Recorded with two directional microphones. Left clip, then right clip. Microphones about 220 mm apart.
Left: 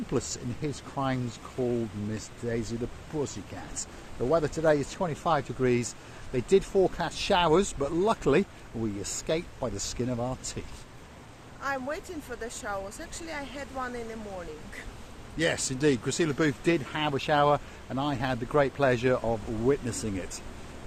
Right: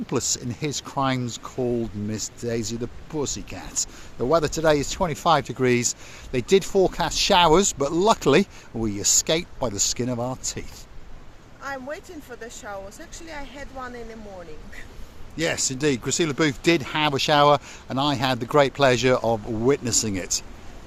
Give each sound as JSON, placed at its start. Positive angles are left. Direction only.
{"t": 0.1, "sound": "speech", "side_deg": -35}
{"t": 11.6, "sound": "speech", "side_deg": 0}
{"t": 15.4, "sound": "speech", "side_deg": -30}